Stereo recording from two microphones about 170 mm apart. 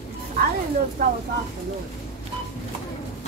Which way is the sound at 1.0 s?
55° right (ahead or behind).